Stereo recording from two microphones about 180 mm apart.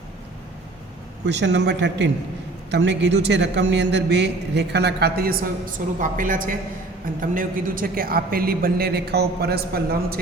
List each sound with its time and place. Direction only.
1.3 s a man's voice: 75° right (ahead or behind)